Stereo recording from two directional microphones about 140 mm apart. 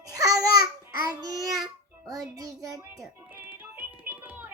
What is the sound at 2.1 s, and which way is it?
Child singing, 25° right (ahead or behind).